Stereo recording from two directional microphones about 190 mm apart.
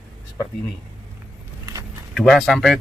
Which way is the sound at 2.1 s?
Centre (ahead or behind).